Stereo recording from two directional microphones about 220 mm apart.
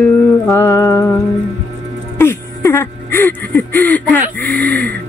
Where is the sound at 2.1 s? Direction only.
10° left (ahead or behind).